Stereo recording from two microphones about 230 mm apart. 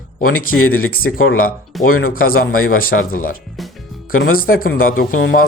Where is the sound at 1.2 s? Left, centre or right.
Left.